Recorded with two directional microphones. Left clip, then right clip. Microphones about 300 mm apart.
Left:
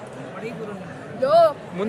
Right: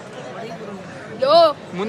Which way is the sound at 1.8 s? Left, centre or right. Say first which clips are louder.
Even; centre.